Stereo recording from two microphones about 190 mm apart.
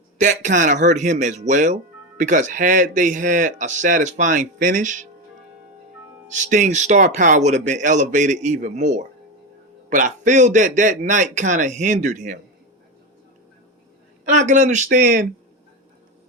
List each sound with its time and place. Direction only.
0.2 s speech: 45° right (ahead or behind)
6.2 s speech: 40° right (ahead or behind)
14.3 s speech: 40° right (ahead or behind)